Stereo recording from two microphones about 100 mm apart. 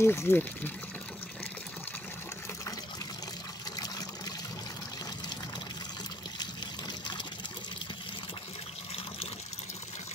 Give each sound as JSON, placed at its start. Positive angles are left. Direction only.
{"t": 0.0, "sound": "speech", "side_deg": 25}